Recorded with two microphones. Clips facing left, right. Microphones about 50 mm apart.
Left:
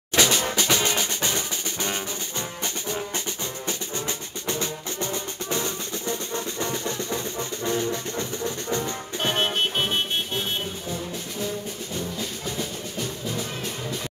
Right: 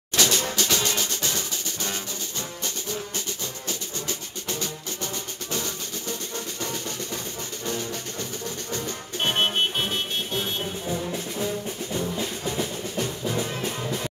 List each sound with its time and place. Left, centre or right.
0.1 s music: left
4.5 s music: left
9.2 s music: right
10.9 s music: centre